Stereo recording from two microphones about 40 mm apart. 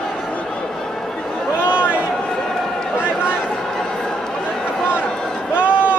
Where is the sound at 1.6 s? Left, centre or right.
Left.